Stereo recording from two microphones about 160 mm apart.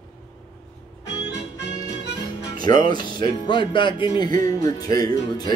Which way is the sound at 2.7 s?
20° left (ahead or behind).